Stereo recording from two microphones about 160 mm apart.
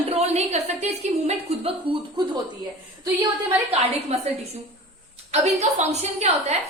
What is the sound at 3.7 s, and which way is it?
Speech, 40° right (ahead or behind).